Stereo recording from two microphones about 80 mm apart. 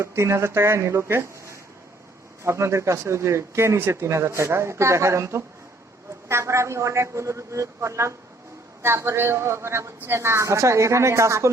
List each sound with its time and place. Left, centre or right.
0.0 s speech: right